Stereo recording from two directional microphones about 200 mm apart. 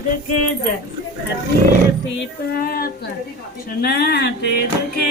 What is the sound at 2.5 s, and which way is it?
Speech, 45° left (ahead or behind).